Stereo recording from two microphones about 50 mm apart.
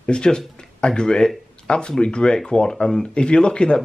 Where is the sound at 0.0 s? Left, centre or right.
Centre.